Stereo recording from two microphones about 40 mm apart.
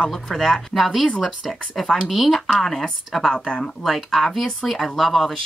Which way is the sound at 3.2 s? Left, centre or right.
Left.